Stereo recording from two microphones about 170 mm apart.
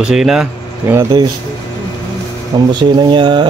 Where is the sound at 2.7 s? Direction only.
25° right (ahead or behind).